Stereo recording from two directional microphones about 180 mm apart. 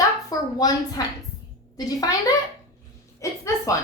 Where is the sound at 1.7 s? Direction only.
20° left (ahead or behind).